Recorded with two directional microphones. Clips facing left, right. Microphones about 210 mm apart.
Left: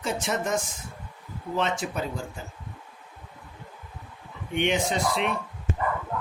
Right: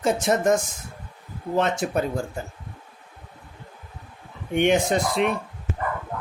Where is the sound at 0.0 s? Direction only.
45° right (ahead or behind).